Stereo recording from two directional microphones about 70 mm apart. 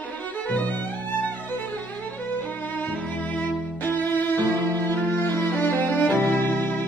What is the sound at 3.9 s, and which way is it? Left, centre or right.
Music, left.